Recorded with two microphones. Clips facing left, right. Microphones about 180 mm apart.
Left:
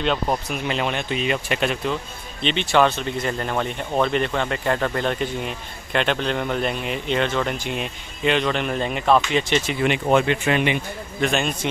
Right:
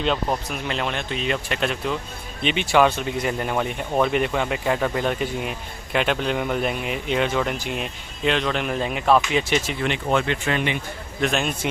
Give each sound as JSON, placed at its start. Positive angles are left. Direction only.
{"t": 0.3, "sound": "speech", "side_deg": 5}
{"t": 2.4, "sound": "speech", "side_deg": -10}
{"t": 9.8, "sound": "speech", "side_deg": 15}
{"t": 11.1, "sound": "speech", "side_deg": 0}